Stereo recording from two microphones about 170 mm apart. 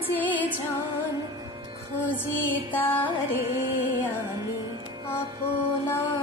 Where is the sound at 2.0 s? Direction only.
10° left (ahead or behind).